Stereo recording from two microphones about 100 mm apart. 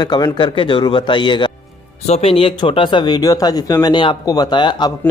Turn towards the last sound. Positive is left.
turn(degrees=50)  # may be behind; listen again after turning